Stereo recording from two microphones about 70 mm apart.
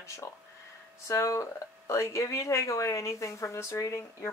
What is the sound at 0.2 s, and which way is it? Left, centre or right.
Speech, left.